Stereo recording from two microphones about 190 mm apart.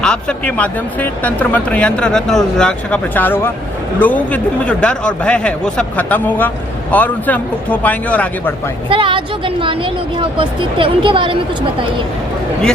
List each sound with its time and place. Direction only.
0.0 s speech: 5° left (ahead or behind)
8.9 s speech: 25° right (ahead or behind)